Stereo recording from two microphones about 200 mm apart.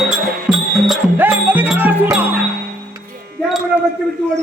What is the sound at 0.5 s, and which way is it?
Music, 5° right (ahead or behind).